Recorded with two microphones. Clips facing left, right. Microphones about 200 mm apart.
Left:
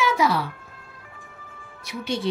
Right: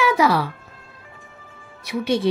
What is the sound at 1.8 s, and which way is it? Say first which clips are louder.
Speech: right 6 dB; 60° right (ahead or behind).